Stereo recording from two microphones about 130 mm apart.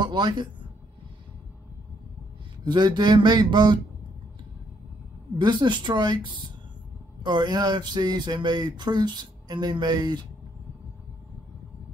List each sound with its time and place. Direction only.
0.0 s speech: 35° right (ahead or behind)
2.6 s speech: 35° right (ahead or behind)
5.4 s speech: 35° right (ahead or behind)